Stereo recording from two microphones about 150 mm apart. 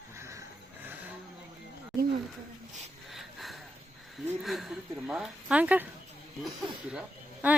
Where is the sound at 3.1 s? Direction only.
Centre (ahead or behind).